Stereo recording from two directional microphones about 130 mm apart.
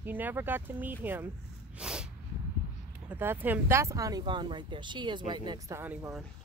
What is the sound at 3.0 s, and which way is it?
Speech, 15° right (ahead or behind).